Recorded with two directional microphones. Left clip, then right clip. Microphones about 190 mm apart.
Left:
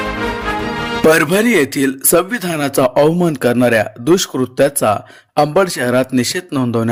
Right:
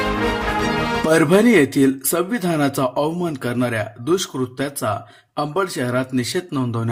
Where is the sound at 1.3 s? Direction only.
40° left (ahead or behind).